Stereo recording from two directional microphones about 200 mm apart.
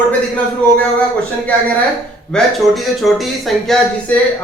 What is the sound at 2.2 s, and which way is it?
A man's voice, centre (ahead or behind).